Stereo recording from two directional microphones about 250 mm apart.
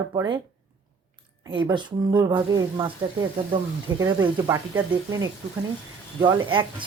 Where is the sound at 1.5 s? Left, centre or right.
Centre.